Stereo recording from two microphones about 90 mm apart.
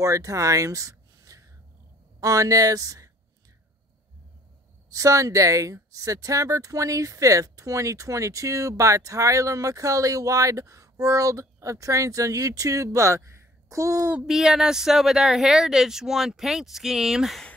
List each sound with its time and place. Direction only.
0.0 s speech: 35° right (ahead or behind)
4.8 s speech: 40° right (ahead or behind)
14.2 s speech: 5° right (ahead or behind)